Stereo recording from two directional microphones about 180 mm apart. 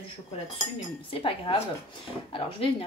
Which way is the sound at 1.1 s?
30° left (ahead or behind).